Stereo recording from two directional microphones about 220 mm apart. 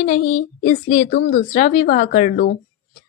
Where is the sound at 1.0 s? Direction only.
40° left (ahead or behind).